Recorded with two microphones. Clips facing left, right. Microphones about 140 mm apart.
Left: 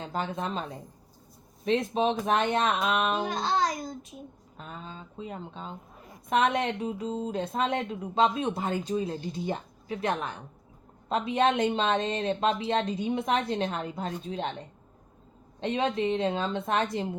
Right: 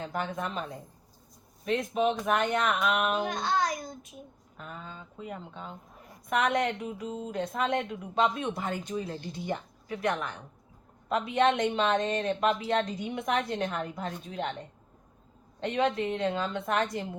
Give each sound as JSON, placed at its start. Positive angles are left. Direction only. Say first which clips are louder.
{"t": 0.0, "sound": "speech", "louder": "left 1 dB", "side_deg": 25}
{"t": 1.6, "sound": "a woman's voice", "louder": "left 2 dB", "side_deg": 30}
{"t": 15.6, "sound": "a woman's voice", "louder": "left 1 dB", "side_deg": 25}